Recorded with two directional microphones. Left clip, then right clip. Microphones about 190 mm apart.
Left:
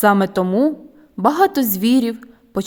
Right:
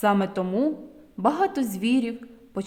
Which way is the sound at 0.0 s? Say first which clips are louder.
Left 8 dB; 40° left (ahead or behind).